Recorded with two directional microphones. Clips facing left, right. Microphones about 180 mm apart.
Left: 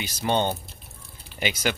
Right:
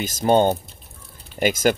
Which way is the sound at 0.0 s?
45° right (ahead or behind).